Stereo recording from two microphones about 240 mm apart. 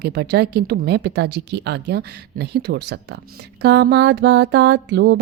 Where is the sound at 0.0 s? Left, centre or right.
Right.